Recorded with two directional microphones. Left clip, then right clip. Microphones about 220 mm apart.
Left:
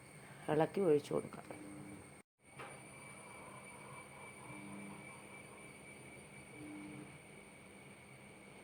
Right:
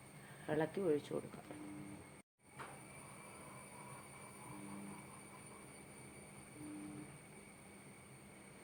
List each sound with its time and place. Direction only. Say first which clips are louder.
0.4 s speech: left 4 dB; 25° left (ahead or behind)